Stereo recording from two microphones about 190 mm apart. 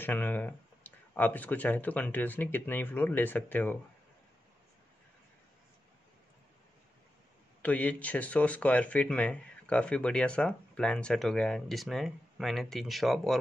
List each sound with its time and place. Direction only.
0.0 s speech: 10° left (ahead or behind)
7.6 s speech: 10° left (ahead or behind)